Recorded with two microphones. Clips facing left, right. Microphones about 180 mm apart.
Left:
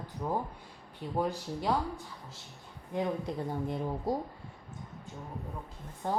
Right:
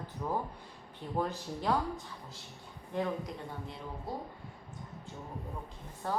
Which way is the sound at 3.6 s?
50° left (ahead or behind).